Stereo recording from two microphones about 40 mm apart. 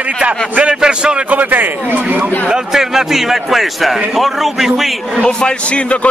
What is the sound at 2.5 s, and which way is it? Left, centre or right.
A man's voice, centre.